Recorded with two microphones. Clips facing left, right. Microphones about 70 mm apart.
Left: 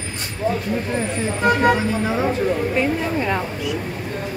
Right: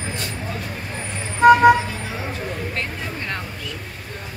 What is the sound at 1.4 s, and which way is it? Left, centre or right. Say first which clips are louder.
Speech: right 6 dB; centre.